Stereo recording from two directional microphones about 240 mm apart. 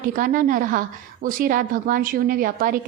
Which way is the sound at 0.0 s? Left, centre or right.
Right.